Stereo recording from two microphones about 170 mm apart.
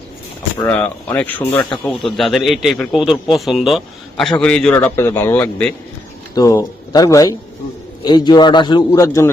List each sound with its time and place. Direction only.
0.6 s a man's voice: 10° left (ahead or behind); by 8.8 s 25° left (ahead or behind)
8.9 s speech: 15° left (ahead or behind)